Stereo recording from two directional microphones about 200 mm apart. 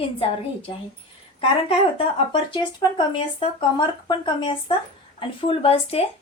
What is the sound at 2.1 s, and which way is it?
A woman's voice, 30° left (ahead or behind).